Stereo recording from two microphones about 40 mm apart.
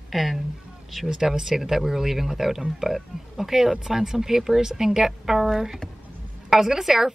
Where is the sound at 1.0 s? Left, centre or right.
Centre.